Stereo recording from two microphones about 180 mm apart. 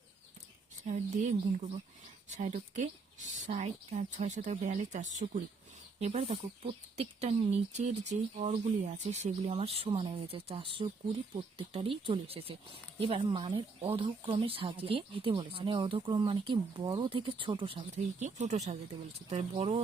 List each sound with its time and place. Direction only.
0.9 s speech: 40° right (ahead or behind)